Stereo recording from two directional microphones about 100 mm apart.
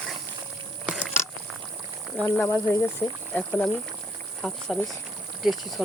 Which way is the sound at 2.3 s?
25° left (ahead or behind).